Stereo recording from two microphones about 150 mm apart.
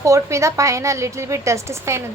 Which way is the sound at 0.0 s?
20° right (ahead or behind).